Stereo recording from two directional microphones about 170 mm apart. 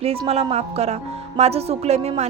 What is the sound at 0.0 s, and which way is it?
A woman's voice, 35° right (ahead or behind).